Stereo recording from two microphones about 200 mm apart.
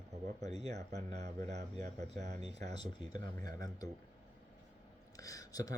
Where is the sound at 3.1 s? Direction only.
20° left (ahead or behind).